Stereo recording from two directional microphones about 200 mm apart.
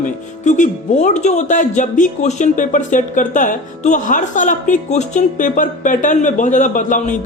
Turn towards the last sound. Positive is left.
turn(degrees=40)  # may be behind; listen again after turning